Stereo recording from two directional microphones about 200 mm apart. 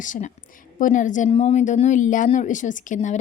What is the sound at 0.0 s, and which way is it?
A woman's voice, 40° left (ahead or behind).